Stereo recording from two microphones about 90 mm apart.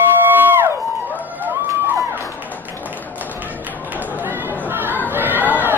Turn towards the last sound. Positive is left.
turn(degrees=-25)  # may be behind; listen again after turning